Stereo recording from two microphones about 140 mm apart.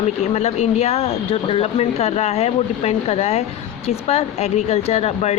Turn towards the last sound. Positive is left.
turn(degrees=50)  # may be behind; listen again after turning